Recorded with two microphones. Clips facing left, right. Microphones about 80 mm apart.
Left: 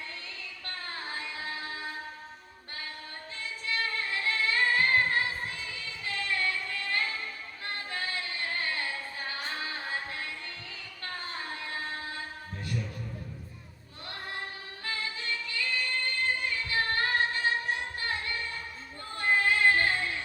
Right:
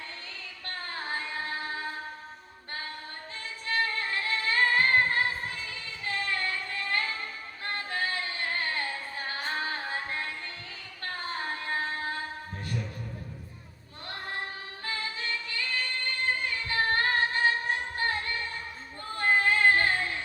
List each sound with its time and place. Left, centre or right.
0.9 s music: right
3.7 s singing: right
7.7 s music: right
11.0 s child singing: right
12.6 s a sound: right
14.8 s music: right
16.6 s music: right
19.1 s female singing: right